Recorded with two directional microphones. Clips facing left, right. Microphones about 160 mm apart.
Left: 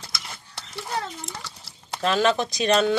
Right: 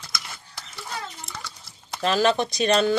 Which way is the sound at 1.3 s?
30° left (ahead or behind).